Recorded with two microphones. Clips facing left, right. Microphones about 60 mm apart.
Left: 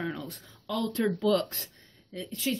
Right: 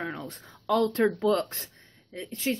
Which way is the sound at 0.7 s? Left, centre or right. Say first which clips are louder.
Right 5 dB; right.